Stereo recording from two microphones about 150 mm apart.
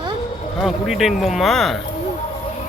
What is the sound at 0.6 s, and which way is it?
Speech, centre (ahead or behind).